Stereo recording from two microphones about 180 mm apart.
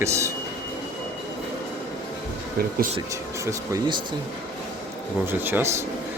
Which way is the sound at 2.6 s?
55° right (ahead or behind).